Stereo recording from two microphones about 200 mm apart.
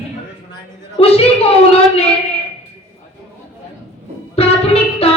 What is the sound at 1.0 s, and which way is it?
A woman's voice, 30° left (ahead or behind).